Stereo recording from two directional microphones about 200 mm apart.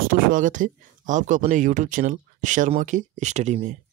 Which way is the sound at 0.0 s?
45° right (ahead or behind).